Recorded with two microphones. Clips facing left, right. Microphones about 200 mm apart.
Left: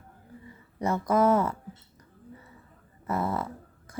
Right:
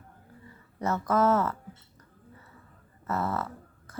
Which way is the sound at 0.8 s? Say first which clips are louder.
Left 2 dB; 15° left (ahead or behind).